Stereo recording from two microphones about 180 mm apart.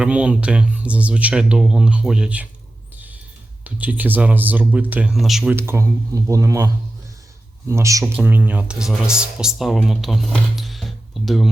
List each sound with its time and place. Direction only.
0.0 s speech: 5° right (ahead or behind)
3.6 s speech: 10° right (ahead or behind)
5.5 s speech: 15° right (ahead or behind)
7.7 s speech: 15° right (ahead or behind); by 11.5 s centre (ahead or behind)